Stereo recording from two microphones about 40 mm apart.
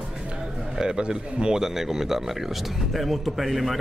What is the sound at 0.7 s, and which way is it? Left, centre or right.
Speech, right.